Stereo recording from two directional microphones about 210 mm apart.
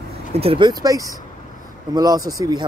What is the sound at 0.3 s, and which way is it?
Speech, 25° right (ahead or behind).